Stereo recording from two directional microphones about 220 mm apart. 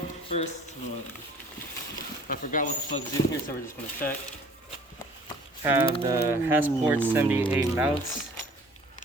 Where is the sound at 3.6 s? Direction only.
10° left (ahead or behind).